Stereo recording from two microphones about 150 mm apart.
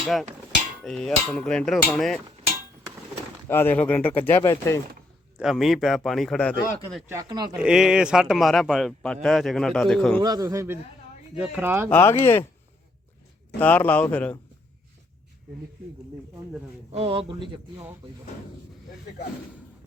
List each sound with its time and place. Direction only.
0.0 s hammer: centre (ahead or behind)
0.9 s speech: 5° left (ahead or behind)
3.5 s speech: 10° left (ahead or behind)
5.4 s speech: centre (ahead or behind)
7.1 s a man's voice: 25° right (ahead or behind)
7.5 s speech: 5° right (ahead or behind)
10.2 s a man's voice: 25° right (ahead or behind)
11.3 s speech: 5° right (ahead or behind)
11.9 s speech: 15° left (ahead or behind)
13.6 s speech: 10° left (ahead or behind)
16.9 s speech: 40° right (ahead or behind)